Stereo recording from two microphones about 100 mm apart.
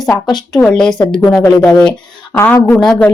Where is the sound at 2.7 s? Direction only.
10° left (ahead or behind).